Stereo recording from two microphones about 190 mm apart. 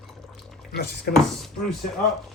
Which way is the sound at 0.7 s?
60° left (ahead or behind).